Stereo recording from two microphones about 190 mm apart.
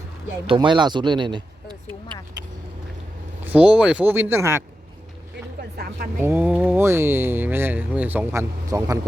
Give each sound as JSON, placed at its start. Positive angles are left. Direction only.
{"t": 0.4, "sound": "speech", "side_deg": -25}
{"t": 2.4, "sound": "vehicle", "side_deg": -20}
{"t": 3.4, "sound": "speech", "side_deg": -5}
{"t": 5.5, "sound": "a woman's voice", "side_deg": -55}
{"t": 6.2, "sound": "speech", "side_deg": -10}